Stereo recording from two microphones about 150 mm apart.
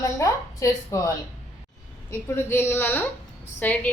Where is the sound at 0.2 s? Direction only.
20° left (ahead or behind).